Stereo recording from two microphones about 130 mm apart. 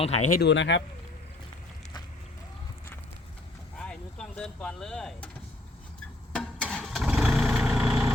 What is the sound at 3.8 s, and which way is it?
Vehicle, 5° left (ahead or behind).